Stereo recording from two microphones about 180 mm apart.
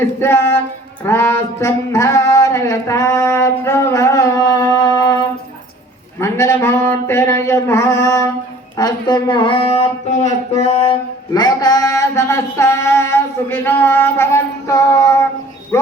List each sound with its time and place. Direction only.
0.2 s speech: 15° left (ahead or behind)
1.0 s a sound: 15° left (ahead or behind)
6.1 s speech: 15° left (ahead or behind); by 10.3 s 40° left (ahead or behind)
11.3 s speech: 20° left (ahead or behind)